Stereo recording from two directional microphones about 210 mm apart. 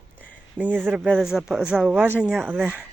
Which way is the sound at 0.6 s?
10° right (ahead or behind).